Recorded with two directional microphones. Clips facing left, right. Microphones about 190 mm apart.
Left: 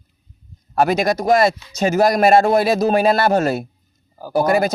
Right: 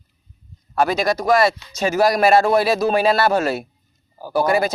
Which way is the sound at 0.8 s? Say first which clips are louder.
Left 2 dB; 45° left (ahead or behind).